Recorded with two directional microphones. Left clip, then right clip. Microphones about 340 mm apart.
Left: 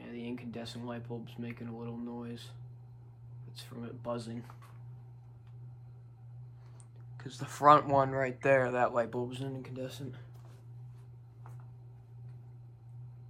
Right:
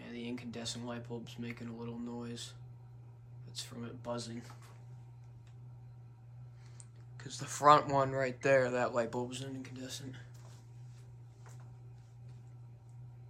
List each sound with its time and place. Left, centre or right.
0.0 s speech: centre
7.2 s speech: centre